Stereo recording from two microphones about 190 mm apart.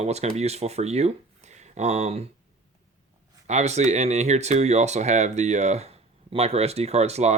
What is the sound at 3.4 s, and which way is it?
Speech, 35° right (ahead or behind).